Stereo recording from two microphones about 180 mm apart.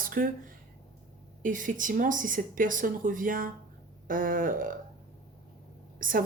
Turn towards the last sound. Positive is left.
turn(degrees=-50)  # may be behind; listen again after turning